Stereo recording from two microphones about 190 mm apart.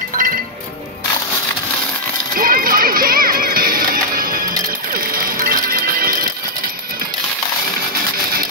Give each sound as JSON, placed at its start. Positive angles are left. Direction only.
{"t": 0.2, "sound": "music", "side_deg": -45}
{"t": 2.3, "sound": "music", "side_deg": -50}